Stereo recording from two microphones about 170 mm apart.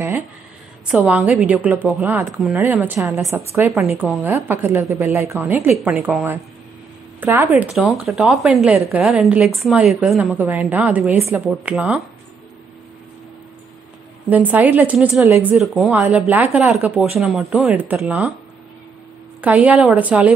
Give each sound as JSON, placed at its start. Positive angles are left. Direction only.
{"t": 0.8, "sound": "a woman's voice", "side_deg": -10}
{"t": 14.3, "sound": "a woman's voice", "side_deg": -10}
{"t": 15.2, "sound": "a woman's voice", "side_deg": -15}
{"t": 15.5, "sound": "speech", "side_deg": 0}
{"t": 19.4, "sound": "a woman's voice", "side_deg": -10}